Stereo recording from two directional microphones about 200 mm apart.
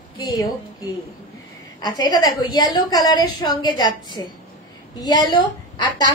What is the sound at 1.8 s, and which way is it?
A woman's voice, 20° left (ahead or behind).